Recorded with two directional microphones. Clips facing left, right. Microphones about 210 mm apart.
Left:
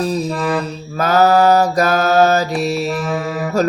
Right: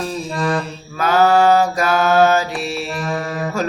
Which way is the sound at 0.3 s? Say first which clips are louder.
Left 2 dB; 5° left (ahead or behind).